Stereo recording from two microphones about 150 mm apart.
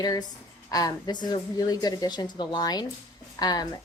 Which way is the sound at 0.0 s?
25° left (ahead or behind).